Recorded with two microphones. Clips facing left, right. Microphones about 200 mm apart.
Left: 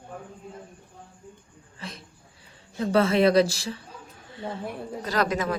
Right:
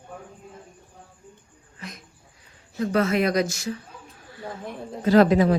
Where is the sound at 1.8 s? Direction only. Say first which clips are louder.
Even; 30° left (ahead or behind).